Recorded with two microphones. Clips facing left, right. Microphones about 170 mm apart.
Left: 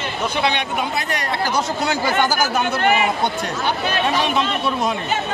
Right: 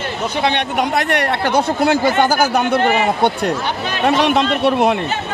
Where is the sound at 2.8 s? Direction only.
35° right (ahead or behind).